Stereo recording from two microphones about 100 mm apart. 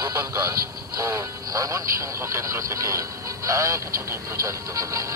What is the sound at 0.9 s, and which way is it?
Music, 35° right (ahead or behind).